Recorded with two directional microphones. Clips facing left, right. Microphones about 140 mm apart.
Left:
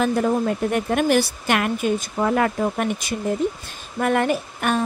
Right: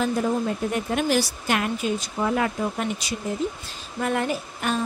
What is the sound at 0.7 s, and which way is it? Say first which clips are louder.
A woman's voice: left 5 dB; 55° left (ahead or behind).